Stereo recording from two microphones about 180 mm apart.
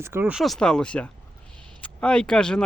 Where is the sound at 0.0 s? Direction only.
15° right (ahead or behind).